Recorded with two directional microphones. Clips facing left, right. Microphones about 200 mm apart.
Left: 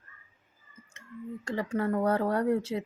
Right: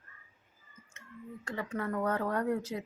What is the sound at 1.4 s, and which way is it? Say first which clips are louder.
Speech: left 6 dB; 30° left (ahead or behind).